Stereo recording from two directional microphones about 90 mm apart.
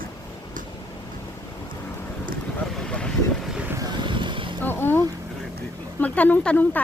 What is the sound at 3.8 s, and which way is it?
Vehicle, 55° right (ahead or behind).